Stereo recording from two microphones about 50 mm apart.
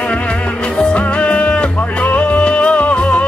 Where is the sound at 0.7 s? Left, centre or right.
Left.